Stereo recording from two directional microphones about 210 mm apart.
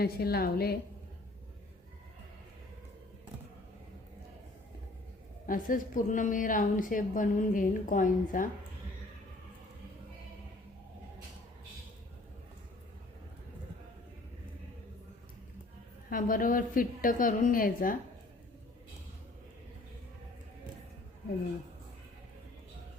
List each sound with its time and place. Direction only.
0.0 s a woman's voice: 45° left (ahead or behind)
5.5 s a woman's voice: 40° left (ahead or behind)
16.0 s a woman's voice: 40° left (ahead or behind)